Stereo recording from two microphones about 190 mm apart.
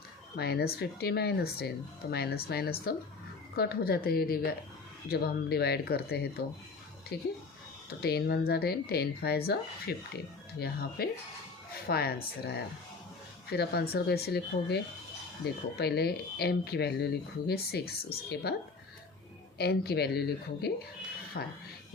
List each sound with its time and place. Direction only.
0.3 s a woman's voice: 60° left (ahead or behind)
19.5 s a woman's voice: 60° left (ahead or behind)